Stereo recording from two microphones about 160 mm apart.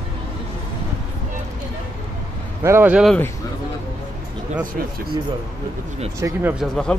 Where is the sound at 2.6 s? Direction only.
15° right (ahead or behind).